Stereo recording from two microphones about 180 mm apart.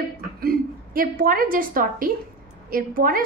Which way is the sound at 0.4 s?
55° right (ahead or behind).